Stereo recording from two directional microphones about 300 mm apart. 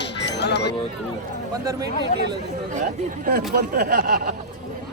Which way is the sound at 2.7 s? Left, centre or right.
Right.